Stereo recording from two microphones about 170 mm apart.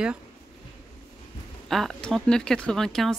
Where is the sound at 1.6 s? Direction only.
Centre (ahead or behind).